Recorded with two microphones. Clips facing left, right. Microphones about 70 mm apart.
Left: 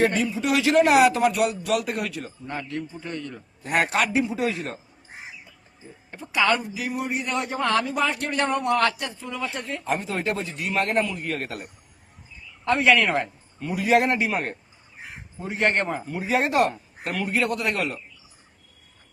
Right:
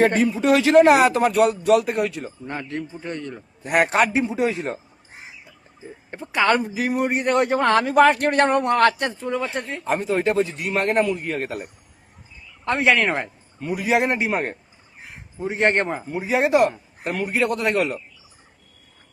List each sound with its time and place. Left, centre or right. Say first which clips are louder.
0.0 s a man's voice: right 4 dB; right
0.4 s speech: right 6 dB; right
6.1 s a man's voice: right 3 dB; right
9.4 s speech: right 3 dB; right
10.1 s speech: right 7 dB; right
12.6 s speech: even; right
13.7 s speech: left 1 dB; centre
14.1 s speech: right 2 dB; right
16.2 s speech: right 4 dB; centre
17.2 s speech: right 2 dB; right